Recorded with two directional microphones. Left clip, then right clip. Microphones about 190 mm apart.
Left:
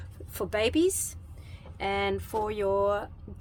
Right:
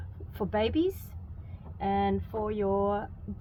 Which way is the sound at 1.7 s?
35° left (ahead or behind).